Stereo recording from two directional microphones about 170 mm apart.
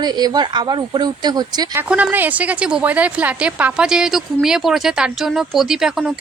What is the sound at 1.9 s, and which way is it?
A woman's voice, 10° right (ahead or behind).